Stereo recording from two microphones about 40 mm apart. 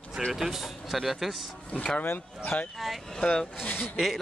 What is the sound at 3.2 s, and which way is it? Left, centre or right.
Speech, centre.